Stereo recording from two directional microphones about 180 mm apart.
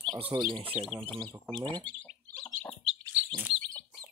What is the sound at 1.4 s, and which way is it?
Speech, 5° left (ahead or behind).